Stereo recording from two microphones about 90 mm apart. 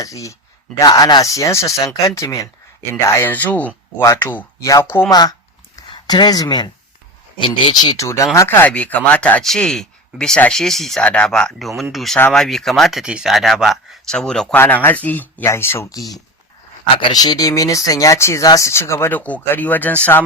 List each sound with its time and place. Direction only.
0.0 s speech: 35° left (ahead or behind)
0.9 s speech: 50° left (ahead or behind); by 2.5 s 35° left (ahead or behind)
3.2 s speech: 20° left (ahead or behind)
4.0 s speech: 30° left (ahead or behind)
5.0 s speech: 50° left (ahead or behind)
7.3 s speech: 65° left (ahead or behind)
7.7 s speech: 50° left (ahead or behind)
8.0 s speech: 30° left (ahead or behind)
8.4 s speech: 25° left (ahead or behind); by 14.4 s 5° left (ahead or behind)
14.5 s speech: 20° left (ahead or behind)
15.9 s speech: 40° left (ahead or behind)
17.2 s speech: 45° left (ahead or behind); by 20.2 s 20° left (ahead or behind)